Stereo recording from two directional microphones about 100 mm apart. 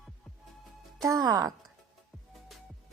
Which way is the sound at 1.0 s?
35° right (ahead or behind).